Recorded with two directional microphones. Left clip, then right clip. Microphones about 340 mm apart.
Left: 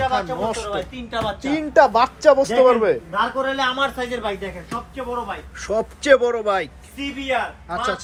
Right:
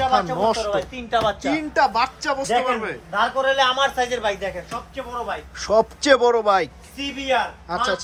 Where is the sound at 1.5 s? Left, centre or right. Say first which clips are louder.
Left 8 dB; centre.